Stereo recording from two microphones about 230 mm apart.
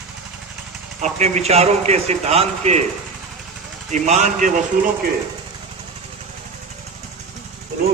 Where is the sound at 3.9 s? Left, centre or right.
Right.